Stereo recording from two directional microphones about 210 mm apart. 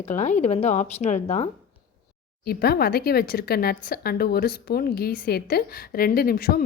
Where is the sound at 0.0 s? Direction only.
35° left (ahead or behind).